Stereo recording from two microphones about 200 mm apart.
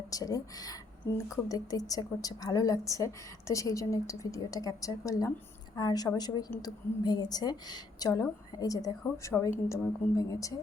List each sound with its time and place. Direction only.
0.1 s a woman's voice: 15° left (ahead or behind)